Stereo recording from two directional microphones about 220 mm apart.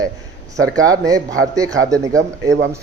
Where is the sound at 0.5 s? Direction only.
15° right (ahead or behind).